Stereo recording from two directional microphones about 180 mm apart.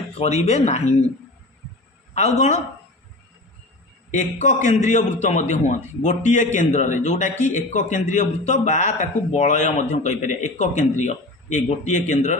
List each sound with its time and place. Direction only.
0.2 s a man's voice: 35° left (ahead or behind)
2.1 s a man's voice: 40° left (ahead or behind)
4.1 s a man's voice: 40° left (ahead or behind)